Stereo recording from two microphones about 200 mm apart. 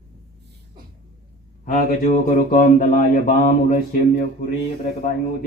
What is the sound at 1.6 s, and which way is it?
Speech, 40° left (ahead or behind).